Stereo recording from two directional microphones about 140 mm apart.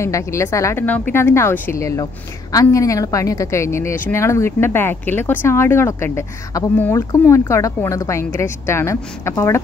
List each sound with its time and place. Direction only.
0.0 s a woman's voice: 20° left (ahead or behind)